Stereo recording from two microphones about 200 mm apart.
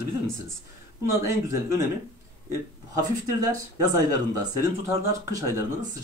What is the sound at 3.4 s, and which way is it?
Speech, 15° right (ahead or behind).